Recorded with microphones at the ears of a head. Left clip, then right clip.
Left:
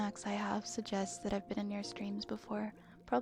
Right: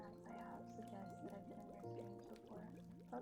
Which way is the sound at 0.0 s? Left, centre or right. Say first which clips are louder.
Left 16 dB; left.